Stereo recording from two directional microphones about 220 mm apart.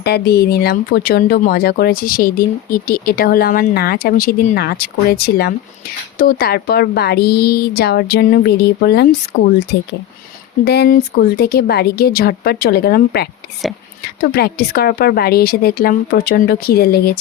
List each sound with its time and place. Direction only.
0.0 s speech: 45° left (ahead or behind)